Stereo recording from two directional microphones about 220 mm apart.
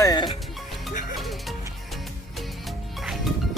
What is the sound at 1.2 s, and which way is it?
Music, centre (ahead or behind).